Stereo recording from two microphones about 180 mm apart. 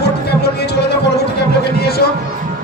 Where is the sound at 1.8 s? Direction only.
60° left (ahead or behind).